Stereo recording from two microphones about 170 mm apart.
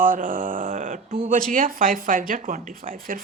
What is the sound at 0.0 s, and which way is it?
Mantra, 55° right (ahead or behind).